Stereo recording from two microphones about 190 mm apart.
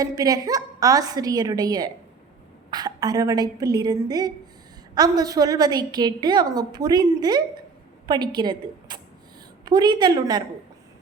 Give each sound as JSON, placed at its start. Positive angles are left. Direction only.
{"t": 0.0, "sound": "a woman's voice", "side_deg": -20}